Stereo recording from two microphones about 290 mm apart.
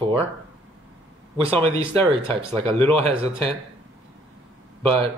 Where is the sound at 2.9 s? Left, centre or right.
Centre.